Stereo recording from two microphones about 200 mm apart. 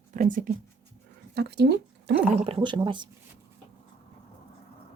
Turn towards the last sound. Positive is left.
turn(degrees=-25)  # may be behind; listen again after turning